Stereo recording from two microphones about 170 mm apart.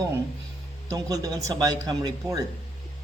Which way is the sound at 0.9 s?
20° right (ahead or behind).